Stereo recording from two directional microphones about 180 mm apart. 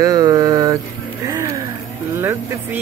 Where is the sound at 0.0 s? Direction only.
20° right (ahead or behind).